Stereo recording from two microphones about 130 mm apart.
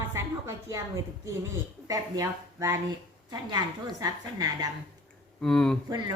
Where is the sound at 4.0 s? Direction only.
30° right (ahead or behind).